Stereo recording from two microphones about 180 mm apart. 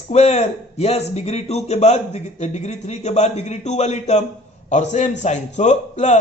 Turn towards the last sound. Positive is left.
turn(degrees=40)  # may be behind; listen again after turning